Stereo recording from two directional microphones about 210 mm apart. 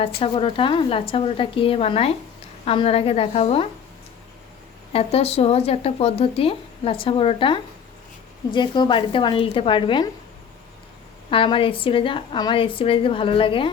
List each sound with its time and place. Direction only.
0.2 s speech: 25° left (ahead or behind)
4.9 s speech: 30° left (ahead or behind)
11.3 s speech: 25° left (ahead or behind)